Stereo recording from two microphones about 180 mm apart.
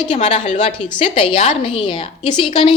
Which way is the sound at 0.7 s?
25° left (ahead or behind).